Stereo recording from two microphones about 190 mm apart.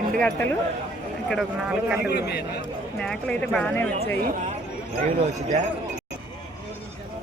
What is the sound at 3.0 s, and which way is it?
Speech, 5° left (ahead or behind).